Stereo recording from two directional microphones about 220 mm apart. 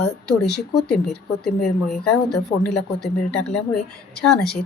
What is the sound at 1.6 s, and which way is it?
Speech, centre (ahead or behind).